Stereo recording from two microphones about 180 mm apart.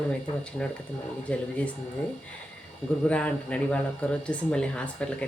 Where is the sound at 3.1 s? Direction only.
5° left (ahead or behind).